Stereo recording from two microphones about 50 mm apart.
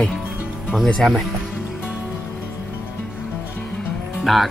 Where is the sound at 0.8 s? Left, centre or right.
Centre.